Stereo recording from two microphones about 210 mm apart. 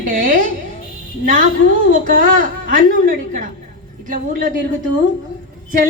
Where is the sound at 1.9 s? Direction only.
40° right (ahead or behind).